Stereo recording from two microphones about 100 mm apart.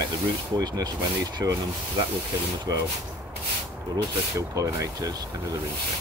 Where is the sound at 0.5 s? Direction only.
45° right (ahead or behind).